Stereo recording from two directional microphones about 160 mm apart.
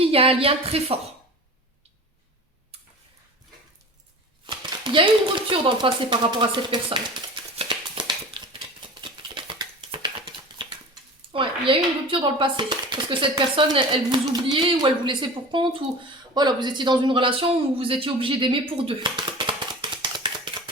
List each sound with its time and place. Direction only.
0.0 s chopping: 35° right (ahead or behind)
2.7 s tick-tock: 40° right (ahead or behind)
4.4 s speech: 30° right (ahead or behind)
7.6 s a sound: 30° right (ahead or behind)
11.3 s chopping: 30° right (ahead or behind)
16.3 s speech: 25° right (ahead or behind)